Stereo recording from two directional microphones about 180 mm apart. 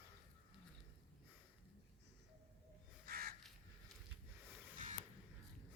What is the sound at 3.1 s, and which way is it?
Crow, 55° right (ahead or behind).